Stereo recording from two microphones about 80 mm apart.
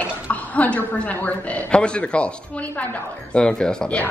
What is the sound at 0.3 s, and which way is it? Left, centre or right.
A woman's voice, centre.